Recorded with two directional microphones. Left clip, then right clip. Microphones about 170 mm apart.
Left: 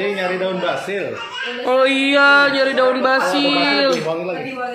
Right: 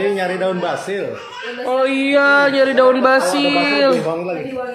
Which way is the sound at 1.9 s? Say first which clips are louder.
Right 1 dB; 15° right (ahead or behind).